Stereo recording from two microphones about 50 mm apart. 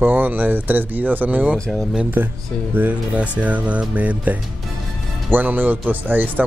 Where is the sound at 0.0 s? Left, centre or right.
Right.